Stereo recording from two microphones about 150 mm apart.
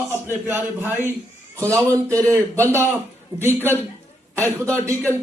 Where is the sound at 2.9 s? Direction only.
15° right (ahead or behind).